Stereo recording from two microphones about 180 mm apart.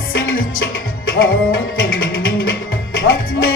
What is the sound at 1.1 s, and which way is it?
Music, 75° left (ahead or behind).